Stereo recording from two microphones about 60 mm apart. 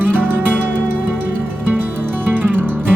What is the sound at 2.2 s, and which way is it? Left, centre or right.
Music, right.